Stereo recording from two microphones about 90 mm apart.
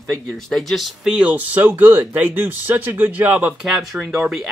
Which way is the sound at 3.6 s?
Centre (ahead or behind).